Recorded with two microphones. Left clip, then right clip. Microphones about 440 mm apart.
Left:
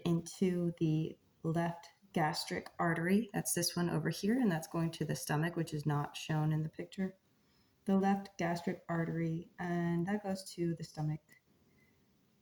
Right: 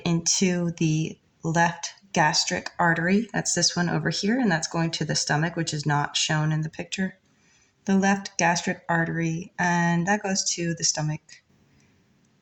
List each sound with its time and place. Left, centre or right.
0.0 s speech: left